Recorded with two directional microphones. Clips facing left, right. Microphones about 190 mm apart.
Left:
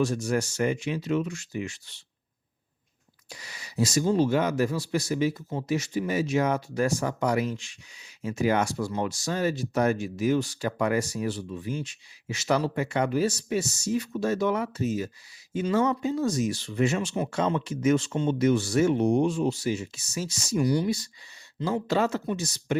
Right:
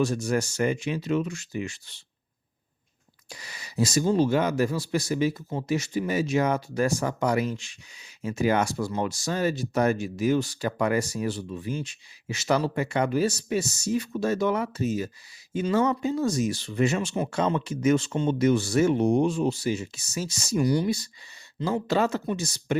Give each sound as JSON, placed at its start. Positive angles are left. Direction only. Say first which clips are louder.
{"t": 0.0, "sound": "speech", "louder": "right 1 dB", "side_deg": -35}
{"t": 3.2, "sound": "speech", "louder": "right 1 dB", "side_deg": -35}